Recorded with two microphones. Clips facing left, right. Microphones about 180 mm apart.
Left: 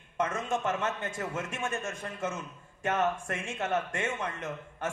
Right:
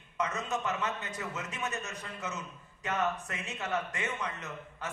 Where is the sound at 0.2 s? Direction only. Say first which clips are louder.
Left 3 dB; 50° left (ahead or behind).